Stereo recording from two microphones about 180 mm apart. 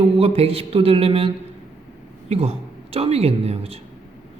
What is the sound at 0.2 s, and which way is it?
Speech, 35° right (ahead or behind).